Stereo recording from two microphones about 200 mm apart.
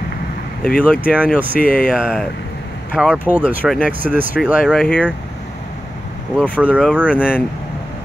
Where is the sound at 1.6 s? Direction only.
45° left (ahead or behind).